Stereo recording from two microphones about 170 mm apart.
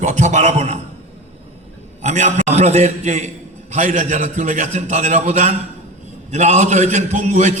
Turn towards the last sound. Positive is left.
turn(degrees=-45)  # may be behind; listen again after turning